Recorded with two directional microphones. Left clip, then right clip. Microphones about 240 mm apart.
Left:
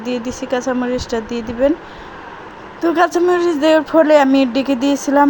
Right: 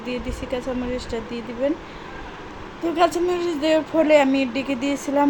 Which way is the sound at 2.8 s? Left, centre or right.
Left.